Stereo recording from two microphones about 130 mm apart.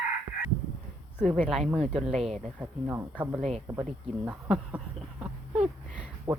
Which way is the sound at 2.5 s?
10° right (ahead or behind).